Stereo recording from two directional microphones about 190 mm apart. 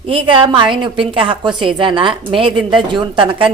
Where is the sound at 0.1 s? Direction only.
25° right (ahead or behind).